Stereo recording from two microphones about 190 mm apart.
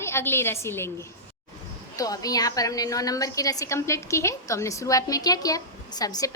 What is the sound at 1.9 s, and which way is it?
A woman's voice, 20° left (ahead or behind).